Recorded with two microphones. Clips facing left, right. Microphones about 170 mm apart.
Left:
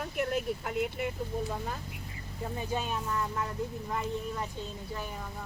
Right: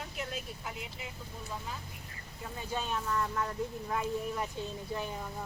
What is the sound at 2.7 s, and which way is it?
Speech, 10° left (ahead or behind).